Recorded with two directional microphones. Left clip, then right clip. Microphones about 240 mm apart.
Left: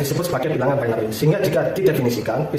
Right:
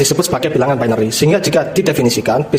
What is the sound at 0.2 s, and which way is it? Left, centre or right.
Speech, right.